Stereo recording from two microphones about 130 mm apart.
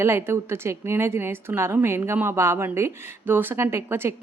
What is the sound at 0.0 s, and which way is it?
A woman's voice, 20° right (ahead or behind).